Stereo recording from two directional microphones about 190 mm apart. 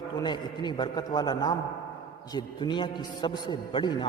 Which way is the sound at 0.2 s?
20° left (ahead or behind).